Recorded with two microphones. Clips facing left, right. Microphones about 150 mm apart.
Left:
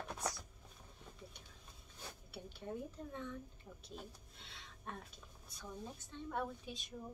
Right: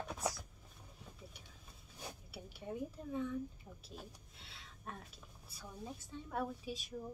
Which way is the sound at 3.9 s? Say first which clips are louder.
Left 1 dB; 5° right (ahead or behind).